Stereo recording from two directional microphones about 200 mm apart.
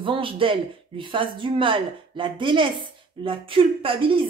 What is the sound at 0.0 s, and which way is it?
Speech, 25° right (ahead or behind).